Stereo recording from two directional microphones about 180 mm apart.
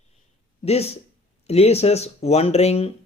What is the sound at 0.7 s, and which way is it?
Speech, 35° left (ahead or behind).